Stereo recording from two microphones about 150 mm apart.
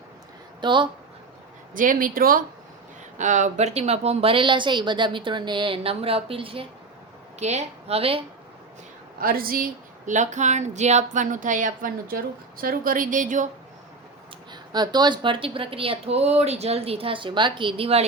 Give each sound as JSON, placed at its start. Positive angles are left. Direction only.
{"t": 0.6, "sound": "speech", "side_deg": -30}
{"t": 1.7, "sound": "speech", "side_deg": -65}
{"t": 3.2, "sound": "speech", "side_deg": -55}
{"t": 7.3, "sound": "a woman's voice", "side_deg": -50}
{"t": 9.1, "sound": "speech", "side_deg": -75}
{"t": 10.1, "sound": "speech", "side_deg": -55}
{"t": 14.5, "sound": "speech", "side_deg": -30}